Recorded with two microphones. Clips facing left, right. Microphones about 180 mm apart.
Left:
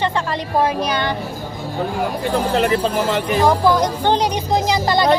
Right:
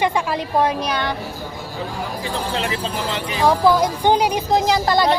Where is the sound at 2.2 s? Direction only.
50° left (ahead or behind).